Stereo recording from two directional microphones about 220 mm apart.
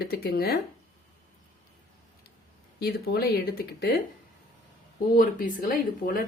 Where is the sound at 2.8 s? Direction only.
45° left (ahead or behind).